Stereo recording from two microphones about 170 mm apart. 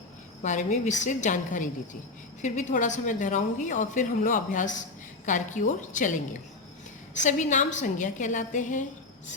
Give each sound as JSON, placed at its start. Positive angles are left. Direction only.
{"t": 0.4, "sound": "a woman's voice", "side_deg": 45}
{"t": 7.3, "sound": "a woman's voice", "side_deg": 45}